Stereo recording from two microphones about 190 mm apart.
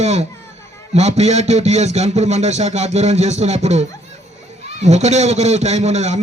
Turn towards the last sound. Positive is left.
turn(degrees=-35)  # may be behind; listen again after turning